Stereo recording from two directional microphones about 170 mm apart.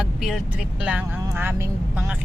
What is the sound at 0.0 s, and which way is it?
Speech, centre (ahead or behind).